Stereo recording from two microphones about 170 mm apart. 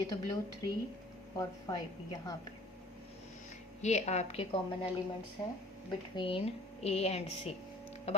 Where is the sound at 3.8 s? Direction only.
40° left (ahead or behind).